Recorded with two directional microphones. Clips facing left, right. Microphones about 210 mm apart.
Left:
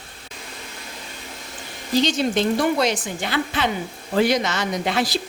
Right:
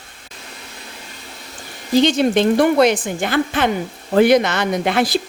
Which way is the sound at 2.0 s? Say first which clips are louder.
Right 6 dB; 55° right (ahead or behind).